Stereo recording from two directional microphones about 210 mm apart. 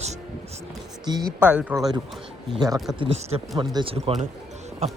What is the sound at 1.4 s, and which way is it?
Speech, 5° right (ahead or behind).